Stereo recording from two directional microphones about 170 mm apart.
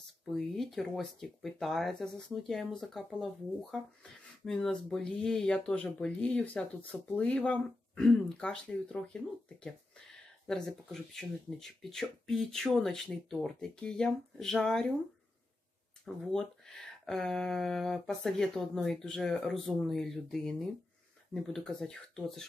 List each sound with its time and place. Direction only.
0.3 s speech: centre (ahead or behind)
10.4 s speech: 5° left (ahead or behind)
16.3 s speech: 5° left (ahead or behind)